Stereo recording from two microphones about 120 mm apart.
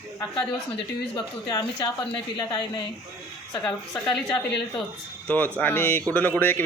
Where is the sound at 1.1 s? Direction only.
35° left (ahead or behind).